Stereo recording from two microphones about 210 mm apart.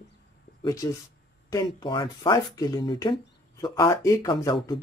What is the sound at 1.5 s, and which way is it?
Speech, 15° left (ahead or behind).